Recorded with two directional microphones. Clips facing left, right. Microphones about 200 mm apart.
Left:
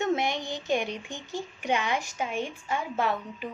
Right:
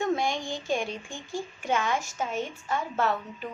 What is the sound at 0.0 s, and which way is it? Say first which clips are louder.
A woman's voice: even; 20° left (ahead or behind).